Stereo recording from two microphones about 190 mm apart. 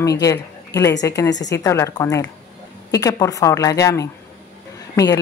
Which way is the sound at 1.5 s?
15° left (ahead or behind).